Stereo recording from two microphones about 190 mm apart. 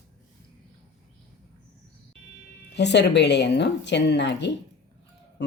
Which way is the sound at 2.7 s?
65° left (ahead or behind).